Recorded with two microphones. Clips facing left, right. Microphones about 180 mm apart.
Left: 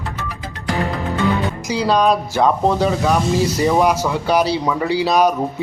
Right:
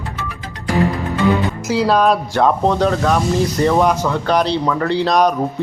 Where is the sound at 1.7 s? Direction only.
5° right (ahead or behind).